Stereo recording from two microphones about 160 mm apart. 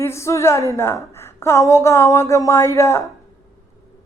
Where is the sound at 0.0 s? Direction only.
15° left (ahead or behind).